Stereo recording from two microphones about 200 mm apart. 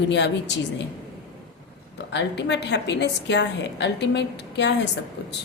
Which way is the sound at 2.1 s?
60° left (ahead or behind).